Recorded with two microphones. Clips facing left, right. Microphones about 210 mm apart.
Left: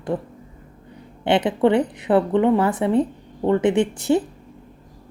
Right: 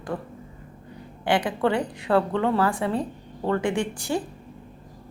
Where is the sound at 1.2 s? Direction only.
20° left (ahead or behind).